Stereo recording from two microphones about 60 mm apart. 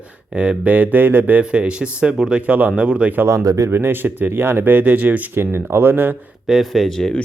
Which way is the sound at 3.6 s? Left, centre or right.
Right.